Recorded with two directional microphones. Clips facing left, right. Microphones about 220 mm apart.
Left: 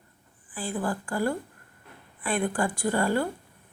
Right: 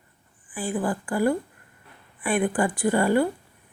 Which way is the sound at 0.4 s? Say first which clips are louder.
Right 4 dB; 20° right (ahead or behind).